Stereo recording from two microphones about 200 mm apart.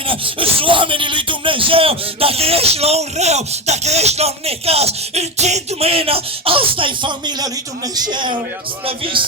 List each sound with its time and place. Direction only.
0.1 s speech: 25° right (ahead or behind)